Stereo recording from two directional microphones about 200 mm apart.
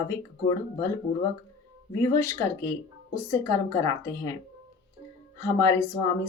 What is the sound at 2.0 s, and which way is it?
A woman's voice, 15° left (ahead or behind).